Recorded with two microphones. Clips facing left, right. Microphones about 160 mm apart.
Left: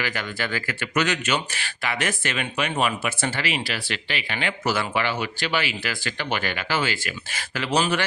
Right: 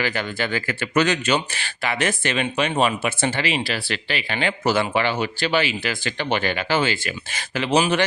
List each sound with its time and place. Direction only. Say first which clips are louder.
0.0 s speech: right 4 dB; 30° right (ahead or behind)